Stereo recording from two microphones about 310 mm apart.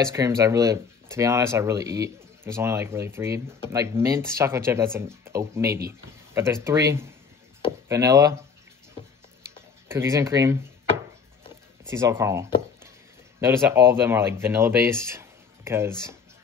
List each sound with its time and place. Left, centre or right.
0.0 s speech: centre
9.8 s speech: centre
11.8 s speech: centre